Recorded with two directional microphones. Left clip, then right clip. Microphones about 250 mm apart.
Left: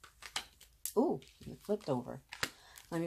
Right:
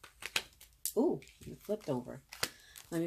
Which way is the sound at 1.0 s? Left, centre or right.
Left.